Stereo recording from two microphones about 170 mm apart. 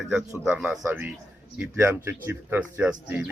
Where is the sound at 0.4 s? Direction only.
5° right (ahead or behind).